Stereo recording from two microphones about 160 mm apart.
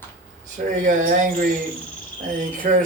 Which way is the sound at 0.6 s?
50° right (ahead or behind).